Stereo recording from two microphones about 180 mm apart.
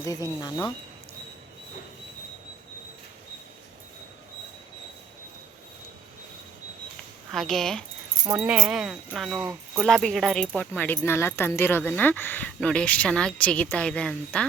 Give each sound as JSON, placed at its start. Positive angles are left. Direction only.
{"t": 0.0, "sound": "speech", "side_deg": 20}
{"t": 7.3, "sound": "speech", "side_deg": 0}